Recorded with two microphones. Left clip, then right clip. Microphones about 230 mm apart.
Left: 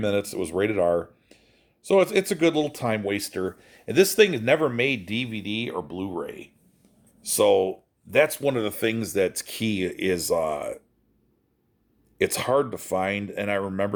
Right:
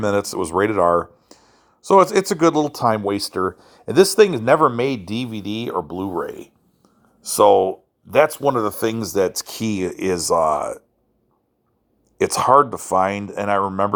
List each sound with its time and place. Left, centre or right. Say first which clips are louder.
0.0 s speech: right 5 dB; centre
7.2 s speech: right 6 dB; centre
12.1 s speech: right 9 dB; centre